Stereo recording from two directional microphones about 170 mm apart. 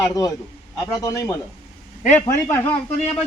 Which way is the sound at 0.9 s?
20° left (ahead or behind).